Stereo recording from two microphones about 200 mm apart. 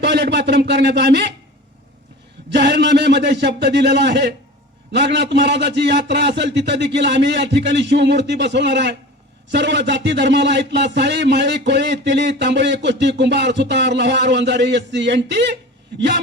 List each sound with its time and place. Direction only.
0.0 s a man's voice: 55° right (ahead or behind)
2.5 s a man's voice: 55° right (ahead or behind)